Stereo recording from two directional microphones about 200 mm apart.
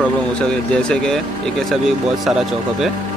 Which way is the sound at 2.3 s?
Centre (ahead or behind).